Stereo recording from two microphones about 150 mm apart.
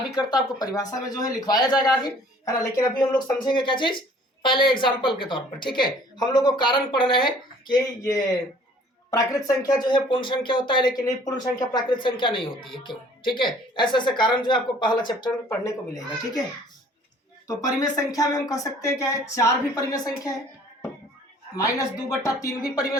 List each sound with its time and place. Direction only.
0.2 s speech: 25° left (ahead or behind)
17.5 s speech: 25° left (ahead or behind)
21.5 s speech: 20° left (ahead or behind)